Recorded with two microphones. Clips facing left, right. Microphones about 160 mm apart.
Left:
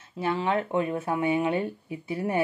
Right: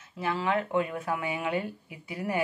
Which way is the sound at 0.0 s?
30° left (ahead or behind).